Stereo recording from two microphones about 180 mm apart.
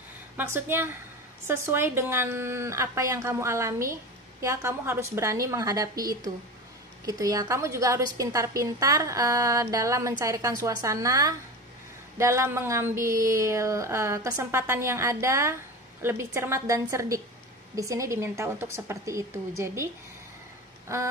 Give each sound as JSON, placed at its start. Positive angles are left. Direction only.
{"t": 0.4, "sound": "speech", "side_deg": -10}
{"t": 20.9, "sound": "speech", "side_deg": -15}